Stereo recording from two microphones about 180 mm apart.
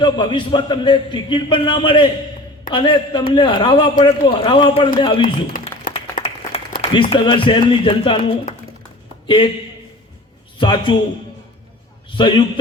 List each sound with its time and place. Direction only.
0.0 s a man's voice: 25° left (ahead or behind)
5.5 s a sound: 50° left (ahead or behind)
6.1 s applause: 35° left (ahead or behind)
6.9 s a man's voice: 25° left (ahead or behind)
10.6 s a man's voice: 25° left (ahead or behind)
12.1 s a man's voice: 25° left (ahead or behind)